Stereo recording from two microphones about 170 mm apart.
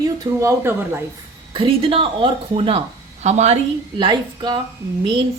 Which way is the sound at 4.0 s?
25° right (ahead or behind).